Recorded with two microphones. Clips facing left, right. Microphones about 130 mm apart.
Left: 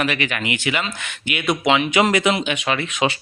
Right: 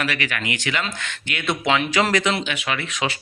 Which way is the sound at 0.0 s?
15° left (ahead or behind).